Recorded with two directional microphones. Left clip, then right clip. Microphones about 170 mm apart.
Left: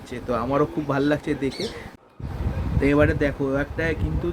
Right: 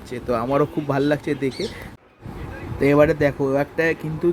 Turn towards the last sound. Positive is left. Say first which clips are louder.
# right 5 dB
turn(degrees=-25)  # may be behind; listen again after turning